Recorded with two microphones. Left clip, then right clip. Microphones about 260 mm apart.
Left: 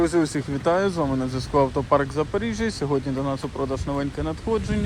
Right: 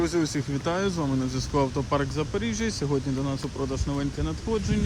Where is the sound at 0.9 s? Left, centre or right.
Left.